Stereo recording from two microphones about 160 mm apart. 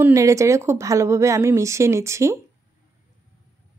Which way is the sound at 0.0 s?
20° right (ahead or behind).